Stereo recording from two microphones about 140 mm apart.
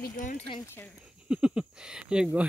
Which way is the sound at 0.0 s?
70° left (ahead or behind).